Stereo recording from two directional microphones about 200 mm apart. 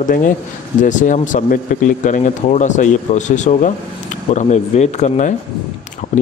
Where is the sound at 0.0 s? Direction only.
40° left (ahead or behind).